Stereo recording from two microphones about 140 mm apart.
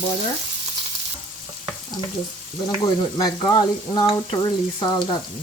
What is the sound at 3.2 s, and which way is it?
Frying, 30° left (ahead or behind).